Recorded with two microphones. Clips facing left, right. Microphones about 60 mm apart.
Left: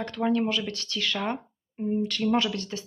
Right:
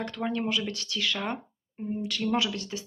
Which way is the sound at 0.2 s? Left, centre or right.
Centre.